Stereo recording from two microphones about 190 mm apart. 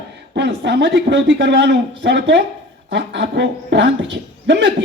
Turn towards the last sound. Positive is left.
turn(degrees=-70)  # may be behind; listen again after turning